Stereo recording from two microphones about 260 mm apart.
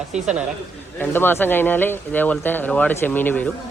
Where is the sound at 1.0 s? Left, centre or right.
Centre.